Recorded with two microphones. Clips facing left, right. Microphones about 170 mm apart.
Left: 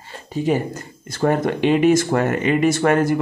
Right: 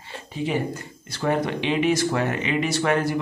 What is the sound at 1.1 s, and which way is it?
Speech, 45° left (ahead or behind).